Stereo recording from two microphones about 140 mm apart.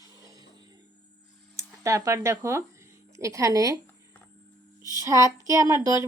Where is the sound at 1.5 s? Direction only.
20° right (ahead or behind).